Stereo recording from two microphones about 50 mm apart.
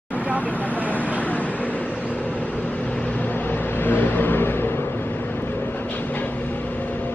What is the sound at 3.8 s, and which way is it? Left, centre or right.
Vehicle, left.